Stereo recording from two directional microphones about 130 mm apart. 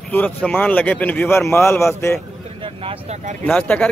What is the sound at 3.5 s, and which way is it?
Speech, 10° left (ahead or behind).